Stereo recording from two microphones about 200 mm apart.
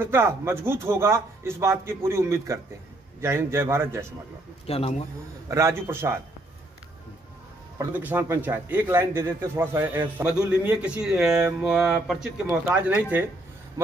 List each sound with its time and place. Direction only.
0.0 s speech: 10° right (ahead or behind)
4.6 s speech: 30° left (ahead or behind)
5.5 s speech: 15° right (ahead or behind)
7.8 s speech: 10° right (ahead or behind)